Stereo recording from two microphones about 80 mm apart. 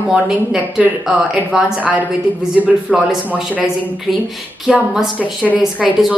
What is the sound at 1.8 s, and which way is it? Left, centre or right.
A woman's voice, centre.